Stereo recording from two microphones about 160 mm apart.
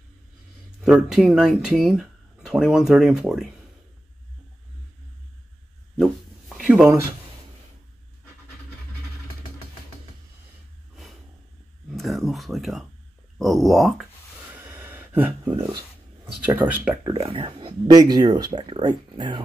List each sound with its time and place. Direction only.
0.7 s speech: 5° right (ahead or behind)
6.5 s a sound: centre (ahead or behind)
11.9 s a sound: centre (ahead or behind)
13.4 s speech: centre (ahead or behind)
14.5 s gasp: 10° right (ahead or behind)
16.3 s speech: 10° right (ahead or behind)
17.1 s speech: 30° right (ahead or behind)